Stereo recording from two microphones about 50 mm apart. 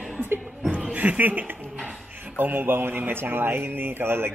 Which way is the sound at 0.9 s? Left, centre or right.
Right.